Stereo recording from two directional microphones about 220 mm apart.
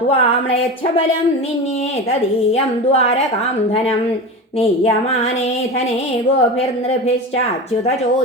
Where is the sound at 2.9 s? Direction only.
30° left (ahead or behind).